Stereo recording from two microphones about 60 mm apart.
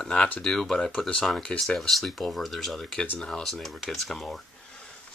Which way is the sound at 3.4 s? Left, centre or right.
Centre.